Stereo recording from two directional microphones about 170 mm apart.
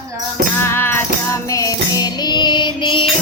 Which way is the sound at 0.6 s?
15° left (ahead or behind).